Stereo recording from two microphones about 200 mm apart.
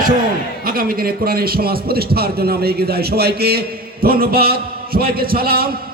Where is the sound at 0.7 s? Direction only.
45° right (ahead or behind).